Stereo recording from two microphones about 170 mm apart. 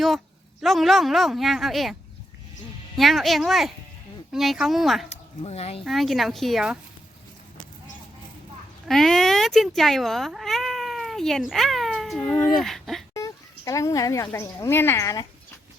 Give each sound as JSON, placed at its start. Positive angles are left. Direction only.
{"t": 0.6, "sound": "speech", "side_deg": 0}
{"t": 5.0, "sound": "speech", "side_deg": 40}
{"t": 5.8, "sound": "speech", "side_deg": 0}
{"t": 8.9, "sound": "speech", "side_deg": 0}
{"t": 13.1, "sound": "speech", "side_deg": 20}